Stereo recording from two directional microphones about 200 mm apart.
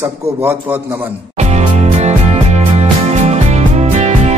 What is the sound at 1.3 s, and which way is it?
Music, 35° right (ahead or behind).